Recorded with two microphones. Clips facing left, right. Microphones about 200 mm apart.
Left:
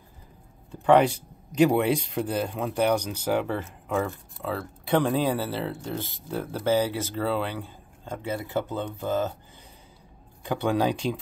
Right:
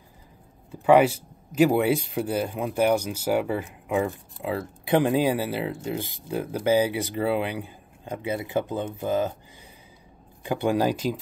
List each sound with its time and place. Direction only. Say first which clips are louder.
0.7 s speech: right 2 dB; 5° right (ahead or behind)
10.4 s speech: right 1 dB; 10° right (ahead or behind)